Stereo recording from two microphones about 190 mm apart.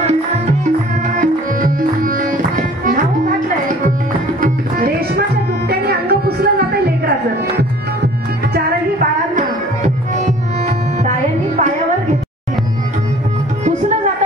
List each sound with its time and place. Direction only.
1.1 s music: 45° right (ahead or behind)
4.4 s tabla: 55° right (ahead or behind)
5.7 s music: 55° right (ahead or behind)
13.7 s music: 40° right (ahead or behind)